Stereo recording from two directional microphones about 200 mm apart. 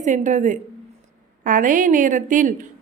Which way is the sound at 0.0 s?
40° right (ahead or behind).